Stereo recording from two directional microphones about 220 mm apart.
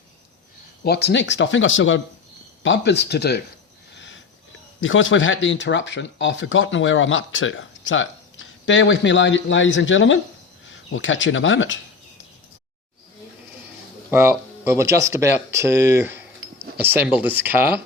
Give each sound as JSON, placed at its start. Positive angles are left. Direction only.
{"t": 0.9, "sound": "speech", "side_deg": 50}
{"t": 3.9, "sound": "sniff", "side_deg": 55}
{"t": 4.8, "sound": "speech", "side_deg": 60}
{"t": 14.1, "sound": "speech", "side_deg": -10}